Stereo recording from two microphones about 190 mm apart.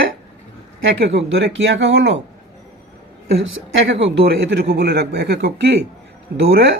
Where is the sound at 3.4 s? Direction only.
65° right (ahead or behind).